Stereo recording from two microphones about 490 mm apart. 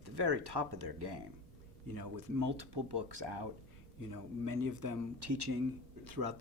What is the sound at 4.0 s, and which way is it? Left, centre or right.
Speech, right.